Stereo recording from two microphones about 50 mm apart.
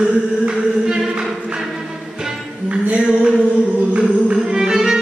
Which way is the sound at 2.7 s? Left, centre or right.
Right.